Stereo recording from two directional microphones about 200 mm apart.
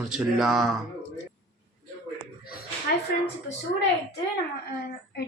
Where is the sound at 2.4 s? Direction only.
50° left (ahead or behind).